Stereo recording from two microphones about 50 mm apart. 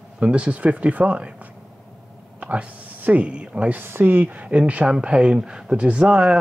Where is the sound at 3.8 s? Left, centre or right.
Right.